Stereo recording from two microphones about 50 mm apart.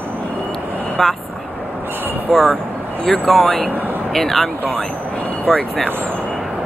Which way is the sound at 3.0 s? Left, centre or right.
Centre.